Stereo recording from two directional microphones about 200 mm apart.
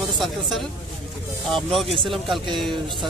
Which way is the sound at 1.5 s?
Centre (ahead or behind).